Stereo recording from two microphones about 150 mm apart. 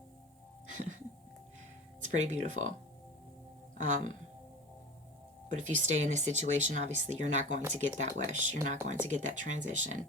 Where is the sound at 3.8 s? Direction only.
55° right (ahead or behind).